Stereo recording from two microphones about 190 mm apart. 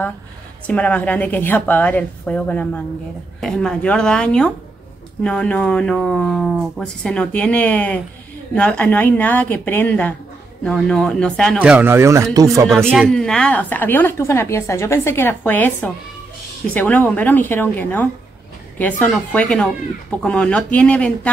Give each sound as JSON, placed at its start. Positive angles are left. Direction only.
{"t": 0.7, "sound": "a woman's voice", "side_deg": 5}
{"t": 11.6, "sound": "speech", "side_deg": -10}
{"t": 12.6, "sound": "a woman's voice", "side_deg": 0}